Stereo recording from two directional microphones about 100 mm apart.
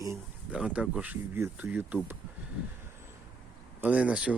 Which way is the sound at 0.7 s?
15° right (ahead or behind).